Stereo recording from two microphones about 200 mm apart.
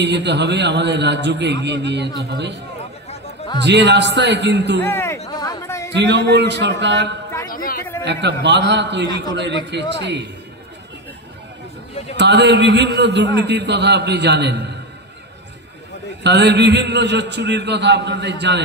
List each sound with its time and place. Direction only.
0.0 s a man's voice: 60° right (ahead or behind)
4.8 s speech: 10° left (ahead or behind)
5.3 s chatter: 20° left (ahead or behind)
5.9 s a man's voice: 60° right (ahead or behind)
7.5 s a sound: 45° left (ahead or behind)
8.0 s a man's voice: 60° right (ahead or behind)
12.2 s a man's voice: 60° right (ahead or behind)
16.2 s a man's voice: 60° right (ahead or behind)